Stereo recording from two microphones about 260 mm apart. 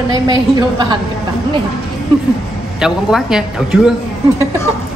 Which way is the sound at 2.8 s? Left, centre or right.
Centre.